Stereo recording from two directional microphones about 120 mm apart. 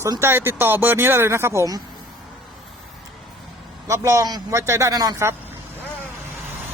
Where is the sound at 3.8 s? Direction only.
25° right (ahead or behind).